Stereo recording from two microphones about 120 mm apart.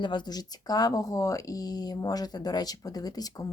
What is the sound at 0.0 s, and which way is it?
Speech, 40° left (ahead or behind).